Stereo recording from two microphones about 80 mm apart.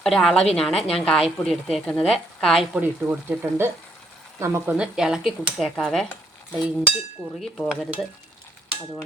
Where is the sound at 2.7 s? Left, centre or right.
Centre.